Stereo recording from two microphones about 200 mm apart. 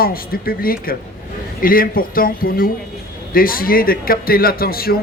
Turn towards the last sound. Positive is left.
turn(degrees=50)  # may be behind; listen again after turning